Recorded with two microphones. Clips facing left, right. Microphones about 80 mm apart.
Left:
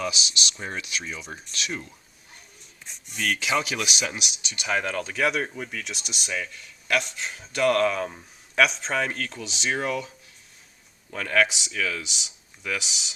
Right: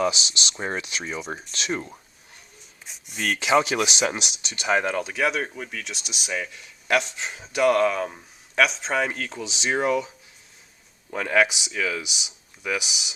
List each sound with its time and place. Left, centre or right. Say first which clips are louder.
0.0 s speech: right 5 dB; right
2.8 s a sound: even; centre
3.4 s speech: right 10 dB; right
4.7 s speech: right 4 dB; centre
11.1 s speech: right 2 dB; centre